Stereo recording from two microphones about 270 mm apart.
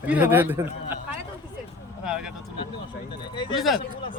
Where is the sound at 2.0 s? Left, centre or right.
Centre.